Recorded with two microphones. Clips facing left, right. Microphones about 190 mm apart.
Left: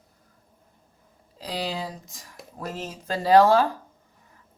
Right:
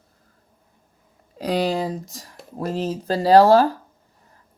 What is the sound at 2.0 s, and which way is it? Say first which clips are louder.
Speech: right 4 dB; 35° right (ahead or behind).